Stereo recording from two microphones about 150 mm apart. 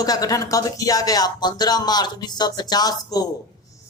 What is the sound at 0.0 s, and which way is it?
Speech, 25° left (ahead or behind).